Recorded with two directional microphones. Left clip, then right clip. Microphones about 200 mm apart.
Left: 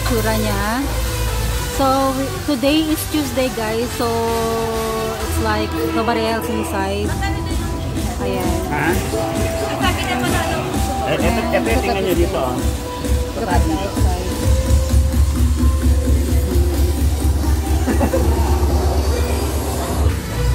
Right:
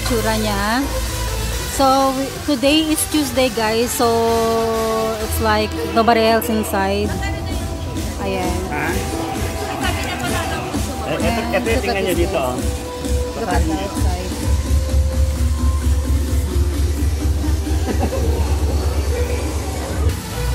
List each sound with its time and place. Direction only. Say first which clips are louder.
0.3 s speech: right 1 dB; 15° right (ahead or behind)
5.4 s speech: right 2 dB; 30° right (ahead or behind)
11.3 s speech: left 1 dB; 20° right (ahead or behind)